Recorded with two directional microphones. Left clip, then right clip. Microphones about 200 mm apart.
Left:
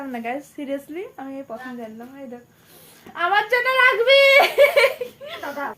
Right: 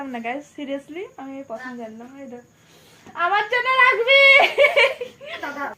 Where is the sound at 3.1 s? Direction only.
15° left (ahead or behind).